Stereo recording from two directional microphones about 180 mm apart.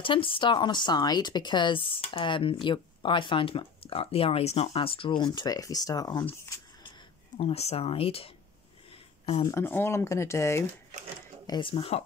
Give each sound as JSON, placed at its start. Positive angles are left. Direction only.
{"t": 0.0, "sound": "speech", "side_deg": 30}
{"t": 7.3, "sound": "speech", "side_deg": 35}
{"t": 9.5, "sound": "speech", "side_deg": 15}
{"t": 11.4, "sound": "speech", "side_deg": 25}